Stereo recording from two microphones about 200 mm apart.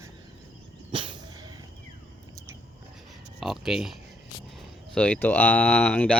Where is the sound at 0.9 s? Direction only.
25° right (ahead or behind).